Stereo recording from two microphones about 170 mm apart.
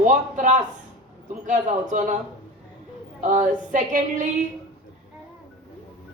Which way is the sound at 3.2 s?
50° right (ahead or behind).